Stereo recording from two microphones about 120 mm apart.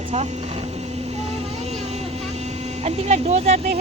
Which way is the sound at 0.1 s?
60° right (ahead or behind).